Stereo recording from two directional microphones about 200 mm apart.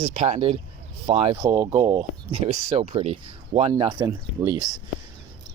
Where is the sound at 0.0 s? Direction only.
35° right (ahead or behind); by 4.6 s 20° right (ahead or behind).